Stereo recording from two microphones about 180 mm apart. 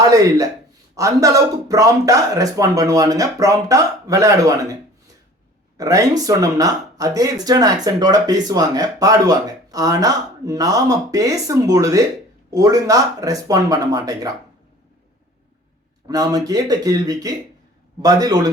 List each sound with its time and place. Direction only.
0.0 s speech: 20° right (ahead or behind)
5.7 s speech: 20° right (ahead or behind)
16.0 s speech: 20° right (ahead or behind)